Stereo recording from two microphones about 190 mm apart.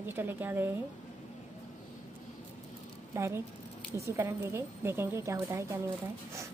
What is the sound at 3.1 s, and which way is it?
A woman's voice, 15° right (ahead or behind).